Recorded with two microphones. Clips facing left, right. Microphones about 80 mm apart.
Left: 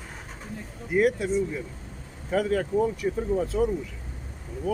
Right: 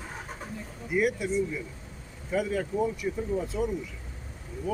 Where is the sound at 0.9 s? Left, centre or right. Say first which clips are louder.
Left 4 dB; left.